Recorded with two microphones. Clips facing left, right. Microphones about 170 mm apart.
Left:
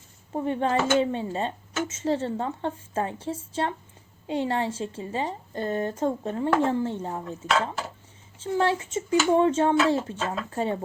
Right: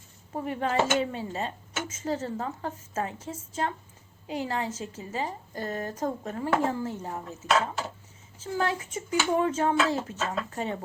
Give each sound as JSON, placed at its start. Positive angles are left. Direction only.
{"t": 0.3, "sound": "speech", "side_deg": 30}
{"t": 8.4, "sound": "speech", "side_deg": 30}